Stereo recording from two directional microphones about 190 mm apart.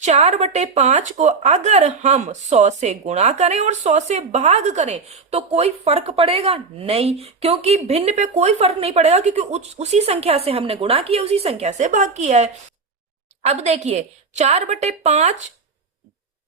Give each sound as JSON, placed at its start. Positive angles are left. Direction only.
{"t": 0.0, "sound": "speech", "side_deg": -35}